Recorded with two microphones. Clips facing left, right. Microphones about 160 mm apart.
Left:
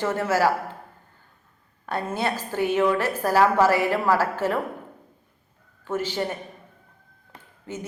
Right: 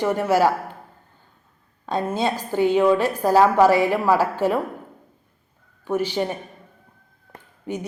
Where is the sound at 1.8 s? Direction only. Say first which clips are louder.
Right 4 dB; 15° right (ahead or behind).